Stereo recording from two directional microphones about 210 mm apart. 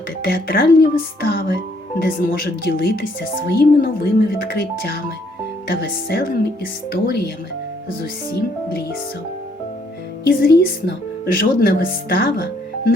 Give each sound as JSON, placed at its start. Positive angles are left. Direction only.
{"t": 0.3, "sound": "speech", "side_deg": 45}
{"t": 10.2, "sound": "speech", "side_deg": 45}